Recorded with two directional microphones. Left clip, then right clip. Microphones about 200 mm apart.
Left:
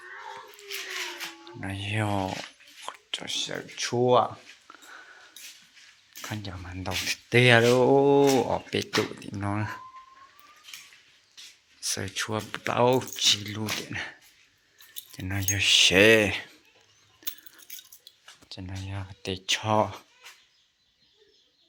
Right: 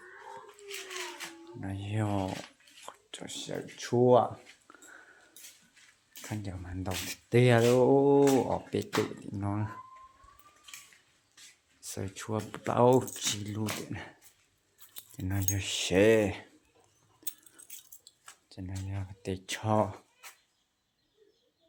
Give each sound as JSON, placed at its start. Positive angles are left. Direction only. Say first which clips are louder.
{"t": 1.6, "sound": "speech", "louder": "left 6 dB", "side_deg": 0}
{"t": 3.1, "sound": "speech", "louder": "left 9 dB", "side_deg": -5}
{"t": 4.7, "sound": "a sound", "louder": "left 7 dB", "side_deg": -10}
{"t": 5.4, "sound": "a sound", "louder": "left 8 dB", "side_deg": 5}
{"t": 6.4, "sound": "speech", "louder": "left 4 dB", "side_deg": -5}
{"t": 11.8, "sound": "speech", "louder": "left 10 dB", "side_deg": -5}
{"t": 12.5, "sound": "speech", "louder": "left 1 dB", "side_deg": -20}
{"t": 17.2, "sound": "a sound", "louder": "left 7 dB", "side_deg": 0}
{"t": 19.5, "sound": "speech", "louder": "left 6 dB", "side_deg": -20}